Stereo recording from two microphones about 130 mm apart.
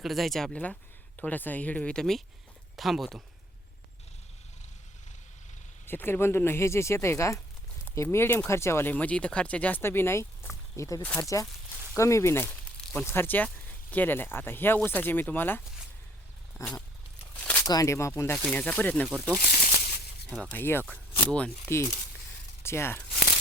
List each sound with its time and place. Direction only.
0.0 s speech: centre (ahead or behind)
5.8 s speech: 15° left (ahead or behind)
10.5 s a sound: 25° left (ahead or behind)
11.2 s speech: 25° left (ahead or behind)
17.4 s a sound: 10° left (ahead or behind)
17.7 s speech: 25° left (ahead or behind)
19.4 s a sound: 90° left
20.5 s speech: 15° left (ahead or behind)
21.7 s speech: 20° left (ahead or behind)